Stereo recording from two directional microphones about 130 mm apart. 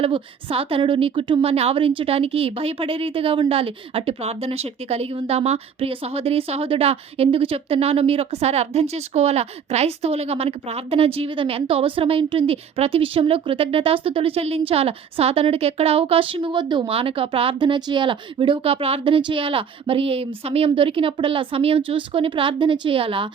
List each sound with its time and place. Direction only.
0.0 s a woman's voice: 45° right (ahead or behind)